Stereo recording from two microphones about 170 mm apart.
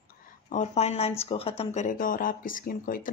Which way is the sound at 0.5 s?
40° left (ahead or behind).